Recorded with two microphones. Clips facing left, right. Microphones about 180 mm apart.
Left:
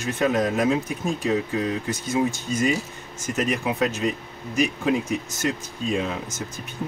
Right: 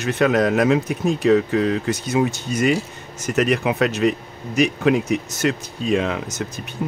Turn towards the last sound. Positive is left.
turn(degrees=-70)  # may be behind; listen again after turning